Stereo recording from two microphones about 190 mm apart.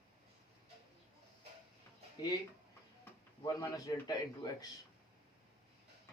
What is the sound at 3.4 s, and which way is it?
A man's voice, 20° left (ahead or behind).